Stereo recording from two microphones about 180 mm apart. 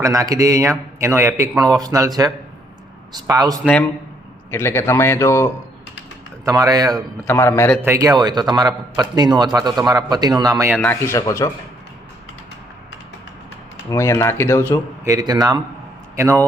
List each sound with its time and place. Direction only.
0.0 s a man's voice: 20° right (ahead or behind)
3.1 s a man's voice: 20° right (ahead or behind)
4.5 s speech: 15° left (ahead or behind)
6.4 s a man's voice: 20° right (ahead or behind)
7.3 s speech: 15° left (ahead or behind)
7.8 s a man's voice: 15° right (ahead or behind)
10.8 s speech: 10° left (ahead or behind)
13.9 s speech: 15° left (ahead or behind)
15.0 s a man's voice: 20° right (ahead or behind)